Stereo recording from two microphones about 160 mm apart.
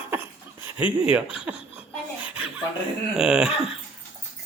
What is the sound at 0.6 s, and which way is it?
Speech, 10° right (ahead or behind).